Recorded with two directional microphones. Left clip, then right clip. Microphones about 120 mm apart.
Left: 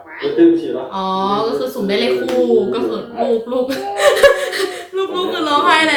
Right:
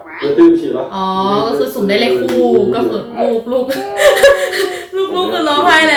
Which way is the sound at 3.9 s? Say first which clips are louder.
Right 3 dB; 15° left (ahead or behind).